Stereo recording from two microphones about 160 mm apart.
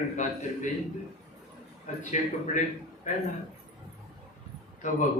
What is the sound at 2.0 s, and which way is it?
Speech, 50° left (ahead or behind).